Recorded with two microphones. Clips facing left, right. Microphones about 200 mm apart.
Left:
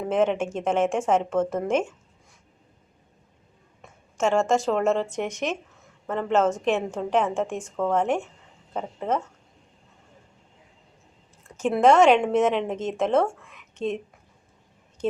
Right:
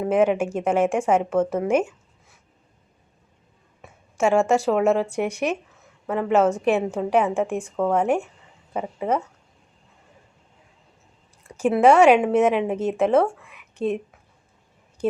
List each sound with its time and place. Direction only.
0.0 s speech: 10° right (ahead or behind)
3.8 s speech: 10° right (ahead or behind)
11.4 s speech: 10° right (ahead or behind)